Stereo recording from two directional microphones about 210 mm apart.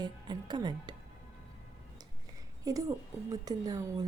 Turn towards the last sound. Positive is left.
turn(degrees=-15)  # may be behind; listen again after turning